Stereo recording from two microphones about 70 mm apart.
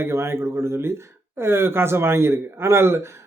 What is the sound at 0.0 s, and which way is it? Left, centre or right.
Speech, right.